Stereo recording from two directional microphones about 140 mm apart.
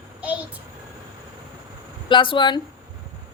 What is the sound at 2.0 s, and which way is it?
Speech, 35° left (ahead or behind).